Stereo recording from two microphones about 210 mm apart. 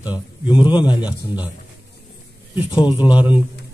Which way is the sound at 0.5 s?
25° left (ahead or behind).